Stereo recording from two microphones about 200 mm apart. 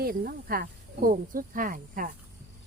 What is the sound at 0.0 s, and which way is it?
A child's voice, 50° right (ahead or behind).